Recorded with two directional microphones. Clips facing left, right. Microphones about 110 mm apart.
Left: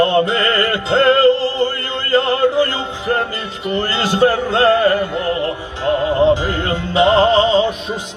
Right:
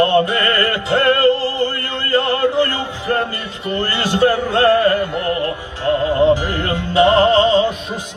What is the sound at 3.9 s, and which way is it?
Music, 20° left (ahead or behind).